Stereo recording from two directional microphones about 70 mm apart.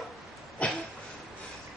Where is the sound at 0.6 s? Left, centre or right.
Centre.